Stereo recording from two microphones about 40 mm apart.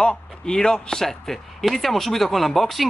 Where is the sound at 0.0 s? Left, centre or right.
Centre.